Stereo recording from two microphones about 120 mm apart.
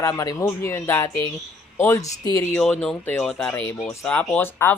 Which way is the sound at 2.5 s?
10° left (ahead or behind).